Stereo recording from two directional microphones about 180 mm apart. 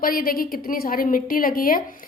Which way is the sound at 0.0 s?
55° left (ahead or behind).